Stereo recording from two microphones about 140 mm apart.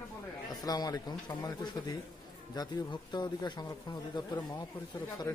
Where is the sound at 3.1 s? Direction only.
30° left (ahead or behind).